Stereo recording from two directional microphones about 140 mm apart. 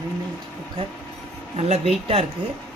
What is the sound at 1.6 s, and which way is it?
Speech, 50° right (ahead or behind).